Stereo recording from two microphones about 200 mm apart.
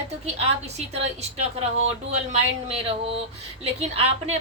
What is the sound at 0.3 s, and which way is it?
A woman's voice, 30° right (ahead or behind).